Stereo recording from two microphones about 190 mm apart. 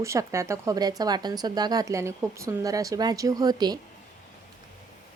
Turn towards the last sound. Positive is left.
turn(degrees=-20)  # may be behind; listen again after turning